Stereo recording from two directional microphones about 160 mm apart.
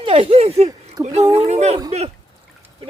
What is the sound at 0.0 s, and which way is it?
Speech, 40° right (ahead or behind).